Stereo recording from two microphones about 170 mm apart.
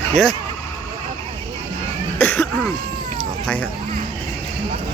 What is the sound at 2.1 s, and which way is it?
Cough, 10° left (ahead or behind).